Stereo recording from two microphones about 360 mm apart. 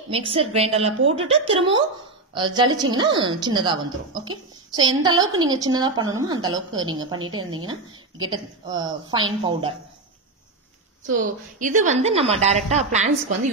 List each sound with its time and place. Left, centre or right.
0.1 s a woman's voice: centre
11.1 s a woman's voice: right